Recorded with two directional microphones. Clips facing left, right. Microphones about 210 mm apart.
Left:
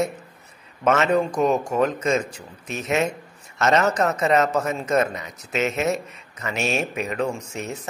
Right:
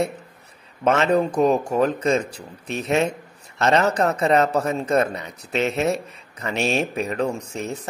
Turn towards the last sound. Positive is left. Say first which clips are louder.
# right 2 dB
turn(degrees=-35)  # may be behind; listen again after turning